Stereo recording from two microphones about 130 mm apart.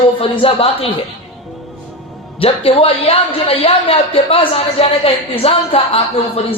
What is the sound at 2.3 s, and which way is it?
A man's voice, 45° left (ahead or behind).